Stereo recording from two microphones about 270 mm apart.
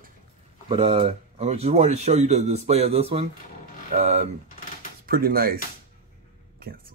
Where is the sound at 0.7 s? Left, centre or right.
Right.